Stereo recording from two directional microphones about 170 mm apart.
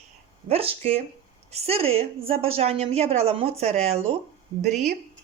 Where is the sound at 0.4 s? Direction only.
35° right (ahead or behind).